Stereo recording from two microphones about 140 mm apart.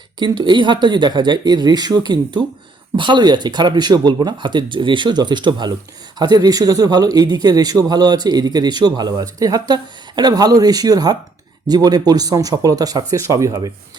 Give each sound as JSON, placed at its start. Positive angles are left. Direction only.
{"t": 0.2, "sound": "a man's voice", "side_deg": -35}